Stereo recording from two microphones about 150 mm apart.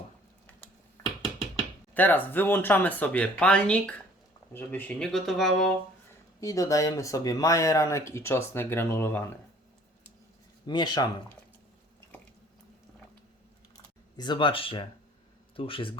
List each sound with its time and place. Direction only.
1.9 s speech: 10° left (ahead or behind)
6.4 s speech: 20° left (ahead or behind)
10.7 s speech: 30° left (ahead or behind)
14.2 s speech: 30° left (ahead or behind)